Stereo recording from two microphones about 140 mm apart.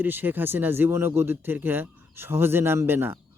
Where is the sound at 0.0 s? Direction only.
15° right (ahead or behind).